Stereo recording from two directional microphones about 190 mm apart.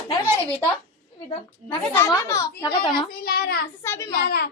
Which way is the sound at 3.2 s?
55° left (ahead or behind).